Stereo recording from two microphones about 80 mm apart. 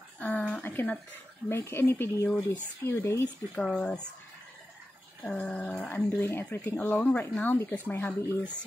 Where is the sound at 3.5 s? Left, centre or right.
Centre.